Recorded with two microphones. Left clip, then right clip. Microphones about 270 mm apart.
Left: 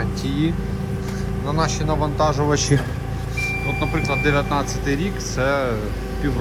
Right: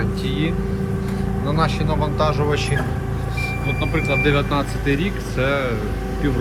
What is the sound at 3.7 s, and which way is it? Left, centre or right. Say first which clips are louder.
Speech: right 1 dB; left.